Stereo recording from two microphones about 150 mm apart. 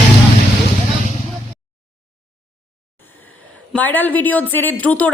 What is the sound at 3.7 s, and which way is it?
A woman's voice, 10° left (ahead or behind).